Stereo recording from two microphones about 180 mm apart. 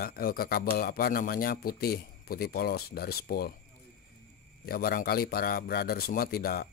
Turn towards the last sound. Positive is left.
turn(degrees=60)  # may be behind; listen again after turning